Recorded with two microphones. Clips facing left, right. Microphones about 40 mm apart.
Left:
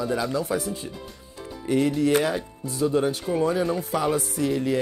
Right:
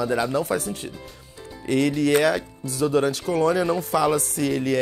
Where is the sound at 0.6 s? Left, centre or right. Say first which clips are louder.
Even; right.